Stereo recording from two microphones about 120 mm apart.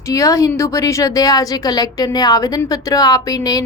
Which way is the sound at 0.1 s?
30° left (ahead or behind).